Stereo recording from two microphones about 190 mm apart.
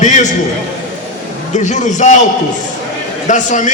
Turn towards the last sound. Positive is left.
turn(degrees=40)  # may be behind; listen again after turning